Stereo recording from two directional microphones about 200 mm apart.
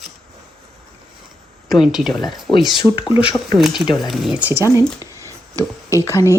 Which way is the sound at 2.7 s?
25° left (ahead or behind).